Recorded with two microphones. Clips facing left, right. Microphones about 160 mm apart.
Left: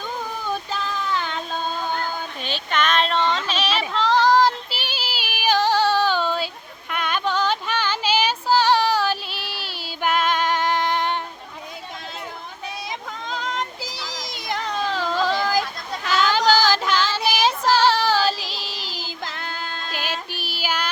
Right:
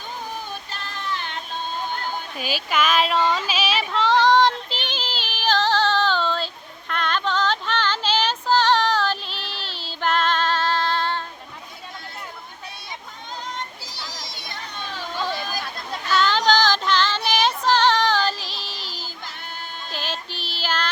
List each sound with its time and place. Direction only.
2.4 s child singing: 5° right (ahead or behind); by 6.5 s 10° left (ahead or behind)
6.9 s female singing: 10° left (ahead or behind)
13.3 s a sound: 90° left
16.0 s female singing: 90° left
16.5 s music: 5° left (ahead or behind)
17.2 s child singing: 5° left (ahead or behind)
18.9 s music: 90° left
19.9 s child singing: 10° left (ahead or behind)